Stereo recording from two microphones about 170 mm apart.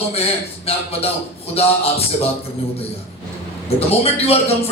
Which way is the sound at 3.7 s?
35° left (ahead or behind).